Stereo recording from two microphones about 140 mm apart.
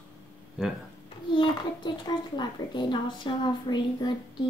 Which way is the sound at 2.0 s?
30° left (ahead or behind).